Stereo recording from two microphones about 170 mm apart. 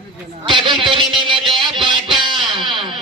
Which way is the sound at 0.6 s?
30° right (ahead or behind).